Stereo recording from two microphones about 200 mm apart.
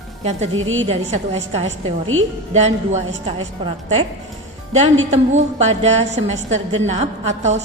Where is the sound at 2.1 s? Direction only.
90° right.